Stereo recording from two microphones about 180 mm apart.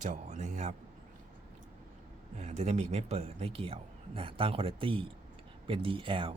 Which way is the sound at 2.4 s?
40° right (ahead or behind).